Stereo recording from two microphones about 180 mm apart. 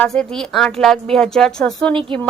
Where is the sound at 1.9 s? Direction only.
25° right (ahead or behind).